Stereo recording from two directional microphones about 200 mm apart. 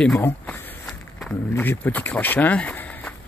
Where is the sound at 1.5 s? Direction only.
10° left (ahead or behind).